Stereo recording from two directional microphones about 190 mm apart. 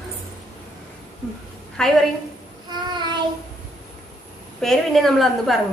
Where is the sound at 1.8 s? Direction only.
5° left (ahead or behind).